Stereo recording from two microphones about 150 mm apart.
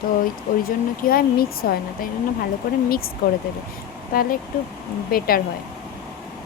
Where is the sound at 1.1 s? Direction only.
90° left.